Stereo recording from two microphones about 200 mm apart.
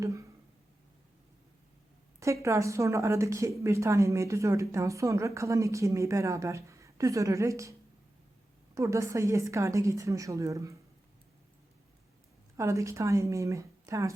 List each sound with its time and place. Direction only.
0.0 s a sound: 15° right (ahead or behind)
2.2 s a woman's voice: 15° right (ahead or behind)
12.5 s a woman's voice: 15° right (ahead or behind)